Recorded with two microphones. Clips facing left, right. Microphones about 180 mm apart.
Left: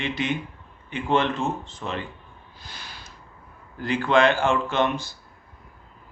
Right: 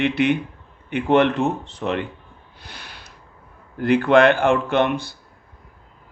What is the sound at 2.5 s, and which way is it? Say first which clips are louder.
Sniff: right 2 dB; 65° right (ahead or behind).